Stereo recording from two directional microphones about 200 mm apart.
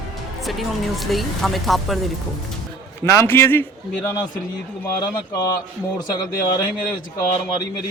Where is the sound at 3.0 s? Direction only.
10° left (ahead or behind).